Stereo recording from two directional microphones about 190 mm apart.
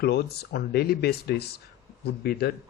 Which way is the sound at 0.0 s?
60° left (ahead or behind).